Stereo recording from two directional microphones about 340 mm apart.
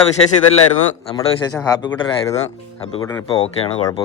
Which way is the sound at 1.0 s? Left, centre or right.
Centre.